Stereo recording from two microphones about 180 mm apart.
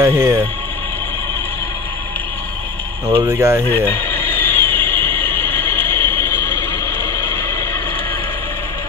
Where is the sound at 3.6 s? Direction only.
10° left (ahead or behind).